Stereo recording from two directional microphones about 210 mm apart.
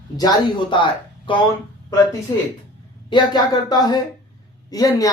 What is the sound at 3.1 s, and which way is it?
Speech, 20° left (ahead or behind).